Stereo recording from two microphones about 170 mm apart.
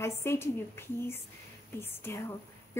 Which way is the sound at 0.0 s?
15° left (ahead or behind).